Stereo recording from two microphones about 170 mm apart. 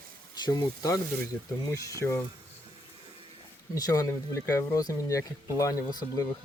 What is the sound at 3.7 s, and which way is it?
Speech, 20° left (ahead or behind).